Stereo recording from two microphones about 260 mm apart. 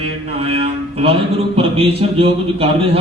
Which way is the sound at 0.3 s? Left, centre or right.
Right.